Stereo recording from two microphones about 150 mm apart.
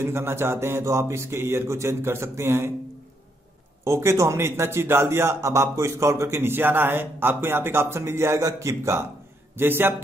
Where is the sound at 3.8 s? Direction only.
20° right (ahead or behind).